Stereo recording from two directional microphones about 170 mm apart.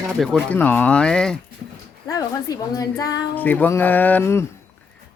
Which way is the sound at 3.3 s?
10° left (ahead or behind).